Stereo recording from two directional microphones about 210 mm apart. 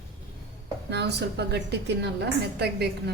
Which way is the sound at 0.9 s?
55° right (ahead or behind).